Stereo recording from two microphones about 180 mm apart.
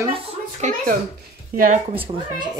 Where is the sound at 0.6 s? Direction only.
45° right (ahead or behind).